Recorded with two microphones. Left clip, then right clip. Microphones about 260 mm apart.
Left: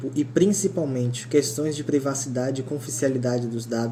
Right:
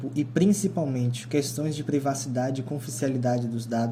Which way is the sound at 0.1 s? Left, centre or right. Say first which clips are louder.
Left 4 dB; right.